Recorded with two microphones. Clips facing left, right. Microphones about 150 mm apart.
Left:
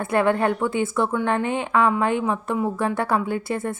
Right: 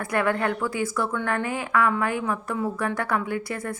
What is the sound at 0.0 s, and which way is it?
Speech, 25° left (ahead or behind).